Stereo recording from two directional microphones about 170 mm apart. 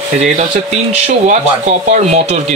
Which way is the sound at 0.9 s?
40° right (ahead or behind).